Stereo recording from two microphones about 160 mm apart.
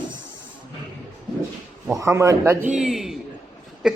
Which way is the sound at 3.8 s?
5° right (ahead or behind).